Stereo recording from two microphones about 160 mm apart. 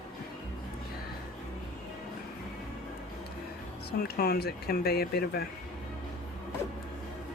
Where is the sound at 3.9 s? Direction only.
75° left (ahead or behind).